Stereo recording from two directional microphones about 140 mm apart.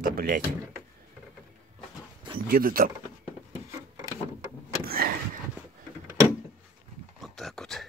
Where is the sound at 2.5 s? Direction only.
90° right.